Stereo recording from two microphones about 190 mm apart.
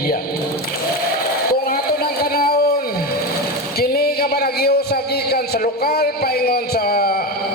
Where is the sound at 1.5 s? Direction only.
55° left (ahead or behind).